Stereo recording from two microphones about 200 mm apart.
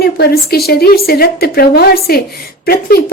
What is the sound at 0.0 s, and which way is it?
Speech, 50° left (ahead or behind).